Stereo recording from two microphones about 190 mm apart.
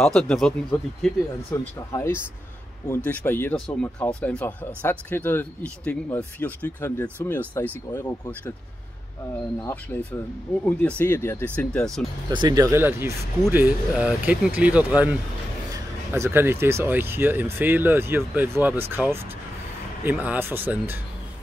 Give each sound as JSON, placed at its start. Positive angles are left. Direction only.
{"t": 0.0, "sound": "speech", "side_deg": 5}
{"t": 1.5, "sound": "speech", "side_deg": 15}
{"t": 10.6, "sound": "speech", "side_deg": 10}
{"t": 12.3, "sound": "speech", "side_deg": -20}
{"t": 20.0, "sound": "speech", "side_deg": -10}